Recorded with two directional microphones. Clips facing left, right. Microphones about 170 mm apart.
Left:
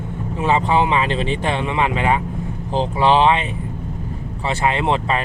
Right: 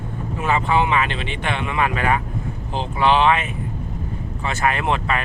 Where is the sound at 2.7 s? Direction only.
35° left (ahead or behind).